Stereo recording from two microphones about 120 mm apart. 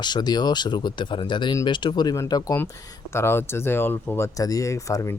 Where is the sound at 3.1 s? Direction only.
20° left (ahead or behind).